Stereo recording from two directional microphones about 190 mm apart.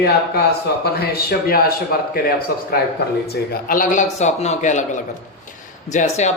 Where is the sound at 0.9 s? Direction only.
55° left (ahead or behind); by 4.9 s 40° left (ahead or behind).